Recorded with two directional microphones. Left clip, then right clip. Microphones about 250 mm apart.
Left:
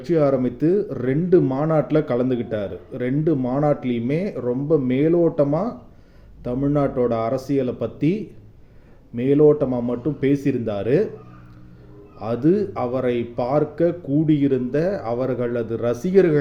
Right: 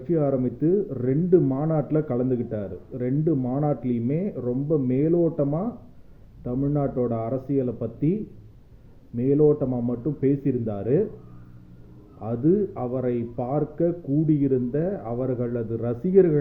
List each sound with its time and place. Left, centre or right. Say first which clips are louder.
0.1 s speech: left 5 dB; centre
12.2 s speech: left 3 dB; centre